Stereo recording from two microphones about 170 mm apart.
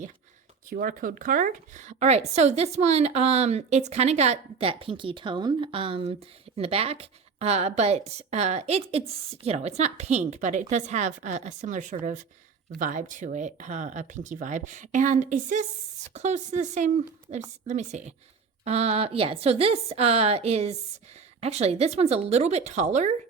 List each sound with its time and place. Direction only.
0.7 s a woman's voice: 55° right (ahead or behind)